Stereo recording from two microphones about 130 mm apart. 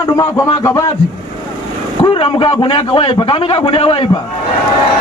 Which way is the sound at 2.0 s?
45° left (ahead or behind).